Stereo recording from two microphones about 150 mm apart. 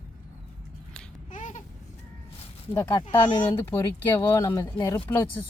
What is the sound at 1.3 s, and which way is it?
Babbling, 55° left (ahead or behind).